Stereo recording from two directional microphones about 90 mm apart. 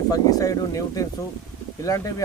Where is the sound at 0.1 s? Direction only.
40° left (ahead or behind).